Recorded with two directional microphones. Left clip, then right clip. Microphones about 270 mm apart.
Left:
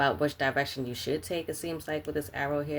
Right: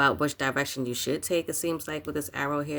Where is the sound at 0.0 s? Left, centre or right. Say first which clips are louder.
Right 2 dB; right.